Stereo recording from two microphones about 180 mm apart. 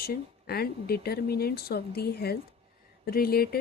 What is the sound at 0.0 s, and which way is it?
Speech, 60° left (ahead or behind).